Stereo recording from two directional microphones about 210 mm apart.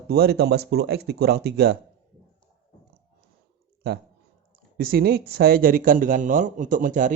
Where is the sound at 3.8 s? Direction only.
50° right (ahead or behind).